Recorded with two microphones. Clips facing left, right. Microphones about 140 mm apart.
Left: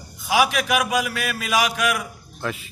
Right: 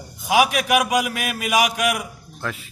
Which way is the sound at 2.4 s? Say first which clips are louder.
Left 1 dB; 5° left (ahead or behind).